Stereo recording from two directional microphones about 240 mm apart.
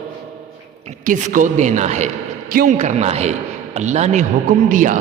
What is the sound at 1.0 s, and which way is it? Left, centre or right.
A man's voice, right.